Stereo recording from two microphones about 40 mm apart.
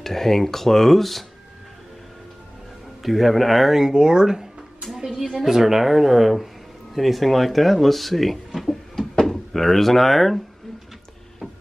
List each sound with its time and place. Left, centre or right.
0.0 s speech: centre
3.0 s speech: centre
3.7 s speech: centre
4.9 s a woman's voice: centre
8.5 s music: centre
9.2 s speech: centre